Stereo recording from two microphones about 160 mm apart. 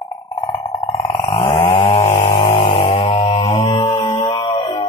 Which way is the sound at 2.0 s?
50° left (ahead or behind).